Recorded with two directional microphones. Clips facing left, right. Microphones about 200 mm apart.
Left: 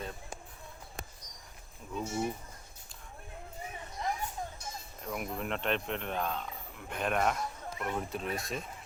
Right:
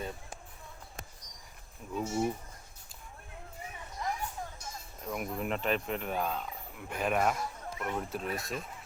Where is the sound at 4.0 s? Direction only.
25° left (ahead or behind).